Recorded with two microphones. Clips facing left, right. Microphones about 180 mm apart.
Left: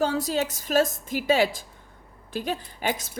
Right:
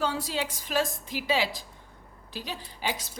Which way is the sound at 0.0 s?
45° left (ahead or behind).